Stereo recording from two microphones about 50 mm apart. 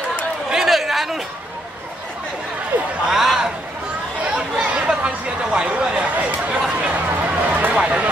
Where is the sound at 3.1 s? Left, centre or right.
Centre.